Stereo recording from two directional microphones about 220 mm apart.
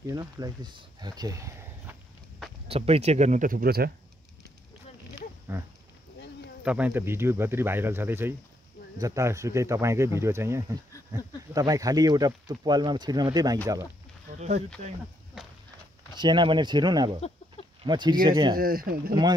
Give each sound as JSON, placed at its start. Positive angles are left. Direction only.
{"t": 0.0, "sound": "speech", "side_deg": -15}
{"t": 2.7, "sound": "speech", "side_deg": -25}
{"t": 5.5, "sound": "speech", "side_deg": -10}
{"t": 16.2, "sound": "speech", "side_deg": -20}
{"t": 18.6, "sound": "speech", "side_deg": -40}